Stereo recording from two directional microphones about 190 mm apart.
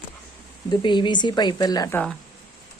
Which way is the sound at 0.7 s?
25° left (ahead or behind).